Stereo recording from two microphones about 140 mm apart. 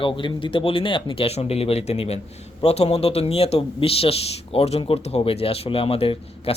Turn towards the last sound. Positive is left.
turn(degrees=45)  # may be behind; listen again after turning